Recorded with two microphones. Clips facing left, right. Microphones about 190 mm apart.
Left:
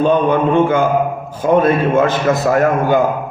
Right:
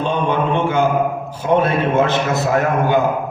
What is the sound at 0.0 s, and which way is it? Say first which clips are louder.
A man's voice: left 6 dB; 50° left (ahead or behind).